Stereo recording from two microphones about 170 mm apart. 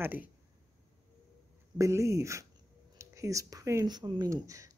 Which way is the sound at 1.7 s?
15° right (ahead or behind).